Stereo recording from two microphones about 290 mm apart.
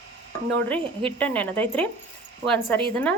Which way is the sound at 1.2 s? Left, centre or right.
Centre.